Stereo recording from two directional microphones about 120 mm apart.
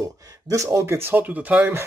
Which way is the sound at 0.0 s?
30° right (ahead or behind).